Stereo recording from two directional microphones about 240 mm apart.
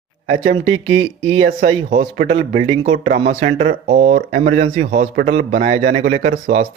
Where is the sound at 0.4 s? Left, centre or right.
Right.